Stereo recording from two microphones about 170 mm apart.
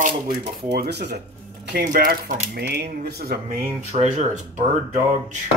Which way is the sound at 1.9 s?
55° right (ahead or behind).